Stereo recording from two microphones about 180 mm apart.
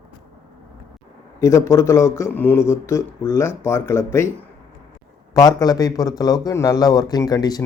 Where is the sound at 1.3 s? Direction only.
15° left (ahead or behind).